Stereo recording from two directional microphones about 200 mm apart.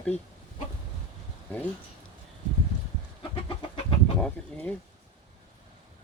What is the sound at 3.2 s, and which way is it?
Bird, 25° left (ahead or behind).